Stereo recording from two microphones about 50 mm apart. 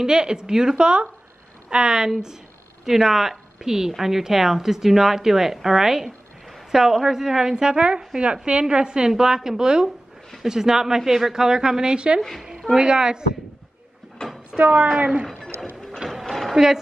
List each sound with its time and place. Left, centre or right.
0.0 s a woman's voice: centre
14.2 s speech: centre
14.6 s a woman's voice: right
15.2 s a sound: centre
16.0 s a sound: centre
16.5 s a woman's voice: centre